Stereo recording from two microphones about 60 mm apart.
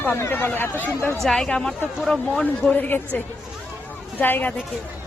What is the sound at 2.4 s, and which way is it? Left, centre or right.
Speech, left.